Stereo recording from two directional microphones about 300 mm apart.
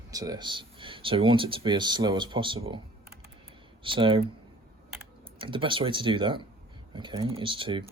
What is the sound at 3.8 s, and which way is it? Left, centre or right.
Speech, centre.